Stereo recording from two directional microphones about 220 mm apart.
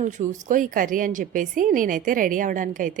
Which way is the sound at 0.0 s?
35° right (ahead or behind).